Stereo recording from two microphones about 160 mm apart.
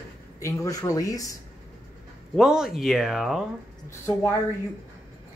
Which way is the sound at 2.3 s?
5° right (ahead or behind).